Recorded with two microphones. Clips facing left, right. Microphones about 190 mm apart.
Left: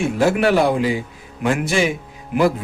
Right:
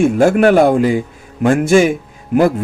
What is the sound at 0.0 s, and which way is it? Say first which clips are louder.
A man's voice: right 6 dB; 50° right (ahead or behind).